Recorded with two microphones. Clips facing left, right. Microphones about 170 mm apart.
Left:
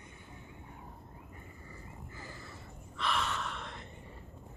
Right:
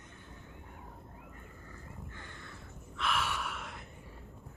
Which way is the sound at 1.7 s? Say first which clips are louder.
Right 1 dB; 5° left (ahead or behind).